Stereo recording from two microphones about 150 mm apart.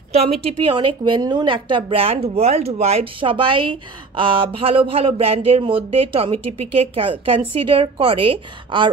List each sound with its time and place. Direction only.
0.1 s a woman's voice: 40° right (ahead or behind)